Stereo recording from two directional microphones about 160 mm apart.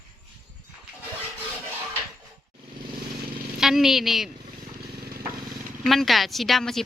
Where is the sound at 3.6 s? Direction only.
Centre (ahead or behind).